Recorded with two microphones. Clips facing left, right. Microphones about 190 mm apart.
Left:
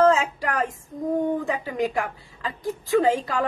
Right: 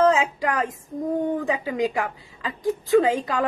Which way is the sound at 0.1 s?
15° right (ahead or behind).